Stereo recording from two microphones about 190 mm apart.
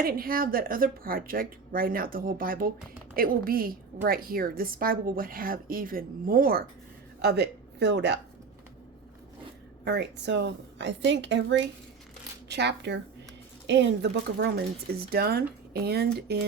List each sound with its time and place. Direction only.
0.0 s speech: 50° right (ahead or behind)
9.8 s a woman's voice: 65° right (ahead or behind)